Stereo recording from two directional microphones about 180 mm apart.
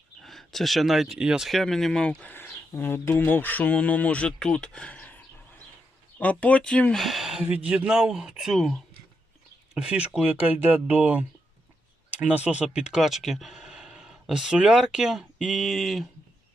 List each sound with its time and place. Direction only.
0.2 s speech: centre (ahead or behind)